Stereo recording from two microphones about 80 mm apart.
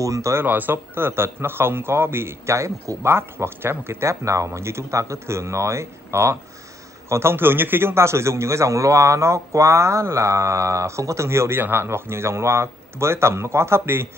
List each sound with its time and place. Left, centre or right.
0.0 s a man's voice: right
0.5 s a man's voice: right